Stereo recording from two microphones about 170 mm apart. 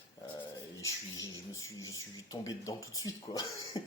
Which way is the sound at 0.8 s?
20° left (ahead or behind).